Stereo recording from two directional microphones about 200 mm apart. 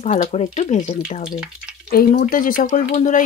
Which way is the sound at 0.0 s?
35° left (ahead or behind).